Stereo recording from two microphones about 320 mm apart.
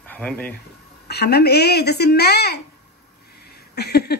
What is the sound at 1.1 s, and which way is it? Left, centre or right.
Speech, left.